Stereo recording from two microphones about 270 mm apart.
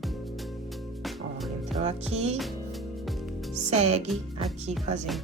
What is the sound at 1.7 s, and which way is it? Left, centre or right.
Music, centre.